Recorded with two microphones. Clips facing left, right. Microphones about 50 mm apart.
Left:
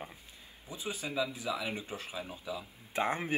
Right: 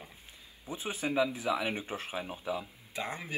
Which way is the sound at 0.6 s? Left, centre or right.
Right.